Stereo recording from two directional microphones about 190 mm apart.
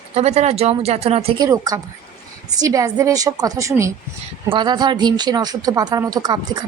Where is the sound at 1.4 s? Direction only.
15° right (ahead or behind).